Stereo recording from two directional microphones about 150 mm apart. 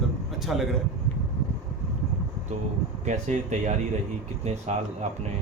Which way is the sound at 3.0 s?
55° right (ahead or behind).